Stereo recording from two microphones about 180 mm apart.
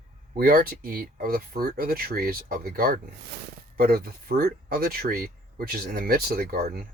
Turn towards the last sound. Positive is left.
turn(degrees=-55)  # may be behind; listen again after turning